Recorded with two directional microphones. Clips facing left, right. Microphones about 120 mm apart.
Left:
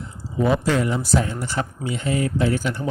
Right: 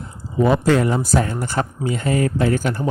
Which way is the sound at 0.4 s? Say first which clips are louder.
Right 4 dB; 45° right (ahead or behind).